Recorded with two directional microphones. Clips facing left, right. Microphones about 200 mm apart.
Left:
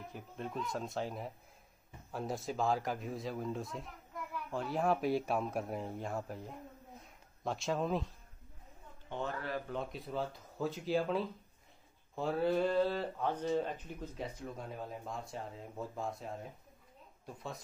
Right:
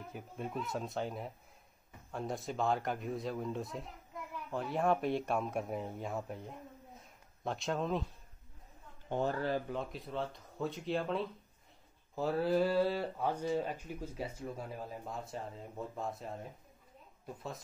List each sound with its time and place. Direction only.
0.1 s speech: 5° right (ahead or behind)
7.0 s a sound: centre (ahead or behind)
9.1 s speech: 35° right (ahead or behind)
9.7 s speech: centre (ahead or behind)